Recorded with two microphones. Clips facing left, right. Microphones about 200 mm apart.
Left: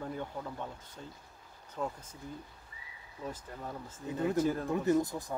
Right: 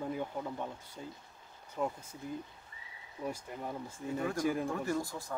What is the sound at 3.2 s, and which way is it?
Speech, 10° right (ahead or behind).